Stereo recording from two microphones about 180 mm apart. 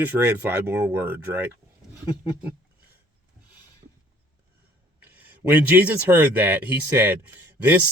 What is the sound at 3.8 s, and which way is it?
Mechanisms, 45° right (ahead or behind).